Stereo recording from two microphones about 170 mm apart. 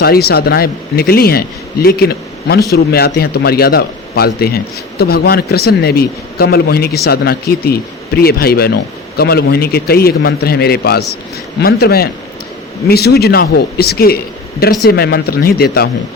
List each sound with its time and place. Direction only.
0.0 s a man's voice: 65° left (ahead or behind)